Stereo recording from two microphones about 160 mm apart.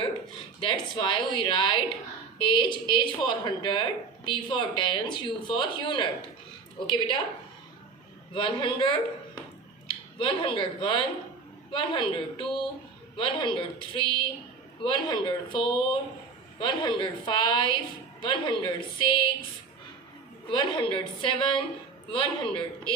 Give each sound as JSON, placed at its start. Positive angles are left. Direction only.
{"t": 0.6, "sound": "a woman's voice", "side_deg": 30}
{"t": 8.3, "sound": "a woman's voice", "side_deg": 30}
{"t": 20.5, "sound": "a woman's voice", "side_deg": 30}